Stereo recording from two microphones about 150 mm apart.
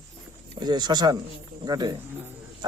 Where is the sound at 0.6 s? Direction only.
30° right (ahead or behind).